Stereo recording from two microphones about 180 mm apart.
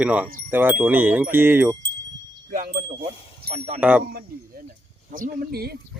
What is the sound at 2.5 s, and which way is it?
Speech, 50° right (ahead or behind).